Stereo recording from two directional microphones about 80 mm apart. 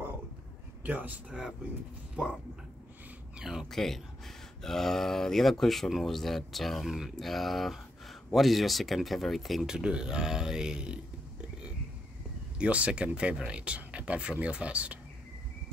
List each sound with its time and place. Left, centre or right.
0.8 s speech: right
2.2 s speech: centre
3.3 s speech: centre
3.7 s speech: centre
12.5 s speech: centre